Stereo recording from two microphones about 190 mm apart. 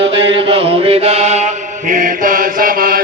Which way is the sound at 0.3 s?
30° right (ahead or behind).